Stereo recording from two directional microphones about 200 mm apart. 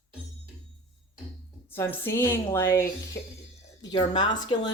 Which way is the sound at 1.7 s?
10° left (ahead or behind).